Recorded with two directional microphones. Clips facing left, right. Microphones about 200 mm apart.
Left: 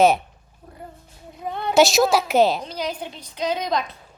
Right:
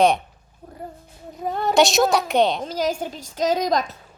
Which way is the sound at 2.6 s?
45° right (ahead or behind).